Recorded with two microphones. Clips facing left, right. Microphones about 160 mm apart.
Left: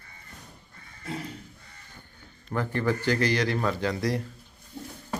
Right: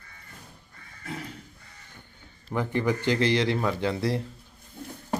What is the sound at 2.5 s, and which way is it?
A man's voice, 15° right (ahead or behind).